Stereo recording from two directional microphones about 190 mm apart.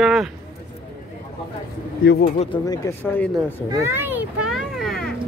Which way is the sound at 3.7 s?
15° right (ahead or behind).